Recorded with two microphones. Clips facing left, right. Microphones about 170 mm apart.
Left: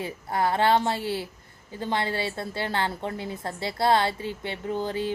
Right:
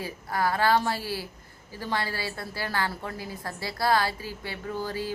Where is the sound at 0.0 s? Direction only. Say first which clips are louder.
Left 2 dB; 25° left (ahead or behind).